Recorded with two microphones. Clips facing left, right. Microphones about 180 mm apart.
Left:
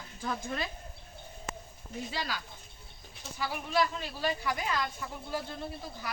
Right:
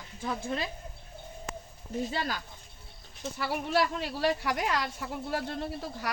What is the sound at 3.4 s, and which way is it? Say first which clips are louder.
A woman's voice: right 2 dB; 70° right (ahead or behind).